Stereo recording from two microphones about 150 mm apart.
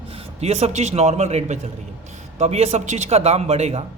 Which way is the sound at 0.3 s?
45° right (ahead or behind).